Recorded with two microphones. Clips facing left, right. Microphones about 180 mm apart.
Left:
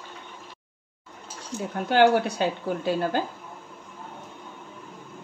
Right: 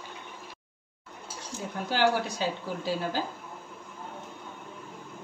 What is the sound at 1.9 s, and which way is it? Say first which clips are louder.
Speech: left 7 dB; 60° left (ahead or behind).